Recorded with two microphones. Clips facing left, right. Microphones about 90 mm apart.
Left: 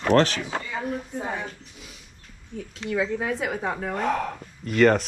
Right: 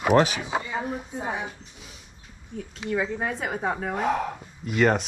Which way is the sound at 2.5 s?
5° right (ahead or behind).